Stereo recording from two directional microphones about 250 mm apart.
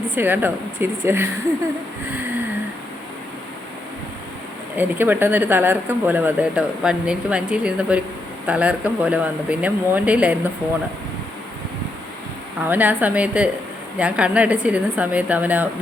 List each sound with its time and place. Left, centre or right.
0.2 s speech: centre
4.8 s speech: centre
12.6 s speech: centre